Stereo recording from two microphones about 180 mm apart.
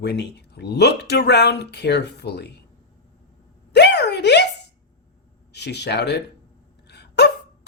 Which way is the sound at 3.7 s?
70° left (ahead or behind).